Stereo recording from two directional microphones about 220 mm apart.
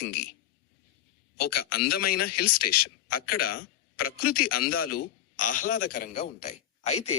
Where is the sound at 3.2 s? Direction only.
90° left.